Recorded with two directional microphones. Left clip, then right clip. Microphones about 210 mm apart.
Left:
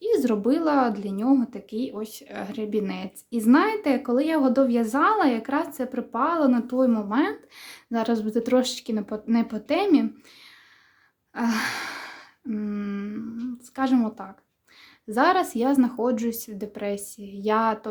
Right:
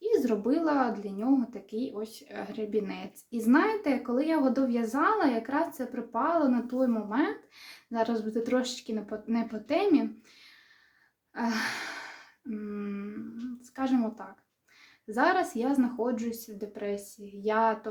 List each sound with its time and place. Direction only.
0.0 s speech: 30° left (ahead or behind)
11.3 s gasp: 30° left (ahead or behind)
13.7 s speech: 30° left (ahead or behind)